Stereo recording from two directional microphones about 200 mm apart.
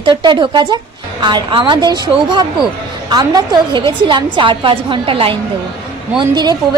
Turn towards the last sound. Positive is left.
turn(degrees=-20)  # may be behind; listen again after turning